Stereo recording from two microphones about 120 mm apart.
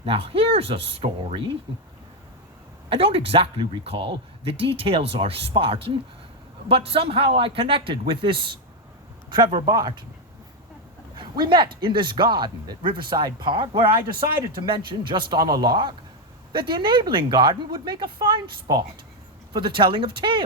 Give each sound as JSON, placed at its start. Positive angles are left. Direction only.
{"t": 0.0, "sound": "speech", "side_deg": -50}
{"t": 1.7, "sound": "speech", "side_deg": -40}
{"t": 2.9, "sound": "speech", "side_deg": -50}
{"t": 11.2, "sound": "speech", "side_deg": -40}